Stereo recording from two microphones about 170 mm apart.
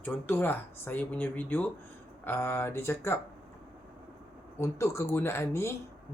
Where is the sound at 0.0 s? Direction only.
10° left (ahead or behind).